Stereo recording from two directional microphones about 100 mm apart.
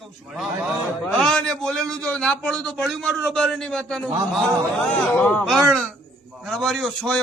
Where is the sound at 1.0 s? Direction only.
5° left (ahead or behind).